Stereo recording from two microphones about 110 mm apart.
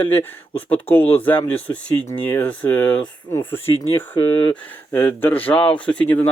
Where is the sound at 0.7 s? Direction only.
15° left (ahead or behind).